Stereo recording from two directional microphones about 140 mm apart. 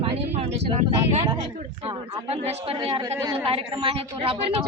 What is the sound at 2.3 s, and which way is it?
A woman's voice, 45° right (ahead or behind).